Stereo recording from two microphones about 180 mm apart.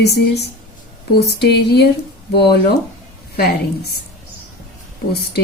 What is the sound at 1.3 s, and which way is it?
Speech, 65° left (ahead or behind).